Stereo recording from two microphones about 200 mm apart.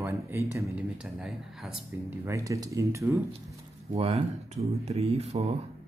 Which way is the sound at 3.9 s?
30° right (ahead or behind).